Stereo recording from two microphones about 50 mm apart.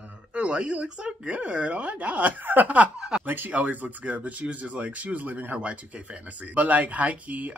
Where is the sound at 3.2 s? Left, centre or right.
Right.